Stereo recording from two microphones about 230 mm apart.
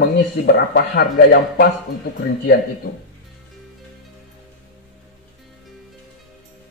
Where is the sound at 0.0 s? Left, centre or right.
Left.